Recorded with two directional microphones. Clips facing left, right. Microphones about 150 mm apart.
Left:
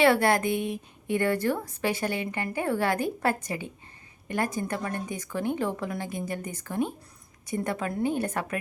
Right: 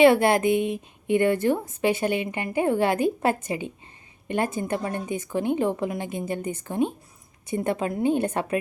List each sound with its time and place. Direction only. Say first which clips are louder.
0.0 s a woman's voice: right 5 dB; 20° right (ahead or behind)